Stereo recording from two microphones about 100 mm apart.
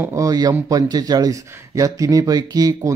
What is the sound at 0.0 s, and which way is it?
Speech, 35° right (ahead or behind).